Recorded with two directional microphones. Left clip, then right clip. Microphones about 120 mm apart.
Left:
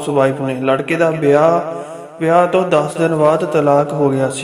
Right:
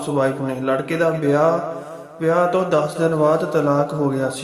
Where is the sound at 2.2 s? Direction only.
20° left (ahead or behind).